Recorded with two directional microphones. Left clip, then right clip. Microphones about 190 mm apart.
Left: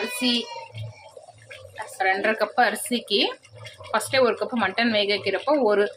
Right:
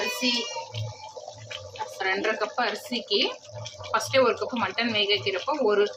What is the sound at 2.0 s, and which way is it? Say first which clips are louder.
Speech: left 5 dB; 25° left (ahead or behind).